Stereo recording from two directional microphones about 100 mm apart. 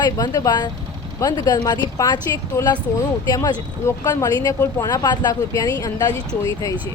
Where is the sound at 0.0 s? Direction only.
40° left (ahead or behind).